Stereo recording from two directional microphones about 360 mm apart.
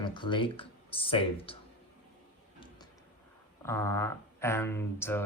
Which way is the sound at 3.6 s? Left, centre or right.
Centre.